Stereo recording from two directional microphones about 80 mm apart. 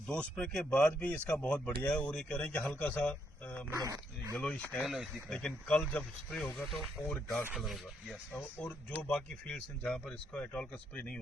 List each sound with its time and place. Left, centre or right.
0.1 s speech: centre
3.8 s speech: right
4.4 s speech: centre
4.9 s speech: centre
5.3 s speech: centre
6.5 s speech: centre
8.4 s speech: left